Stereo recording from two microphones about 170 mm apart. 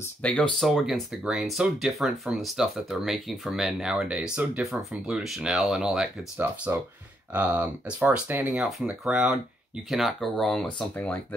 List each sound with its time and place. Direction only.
0.0 s speech: 5° left (ahead or behind)